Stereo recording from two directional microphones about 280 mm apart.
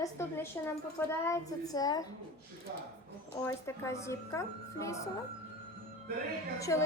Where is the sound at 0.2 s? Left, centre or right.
Centre.